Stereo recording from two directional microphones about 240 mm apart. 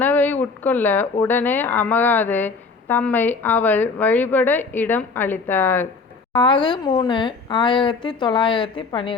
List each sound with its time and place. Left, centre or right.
0.0 s speech: centre
6.3 s speech: centre